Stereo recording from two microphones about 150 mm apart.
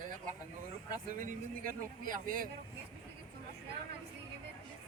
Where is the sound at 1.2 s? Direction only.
65° right (ahead or behind).